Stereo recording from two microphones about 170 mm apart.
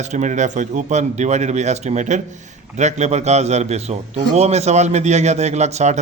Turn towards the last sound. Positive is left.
turn(degrees=-40)  # may be behind; listen again after turning